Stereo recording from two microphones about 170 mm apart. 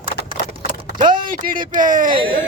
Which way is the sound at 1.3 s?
55° right (ahead or behind).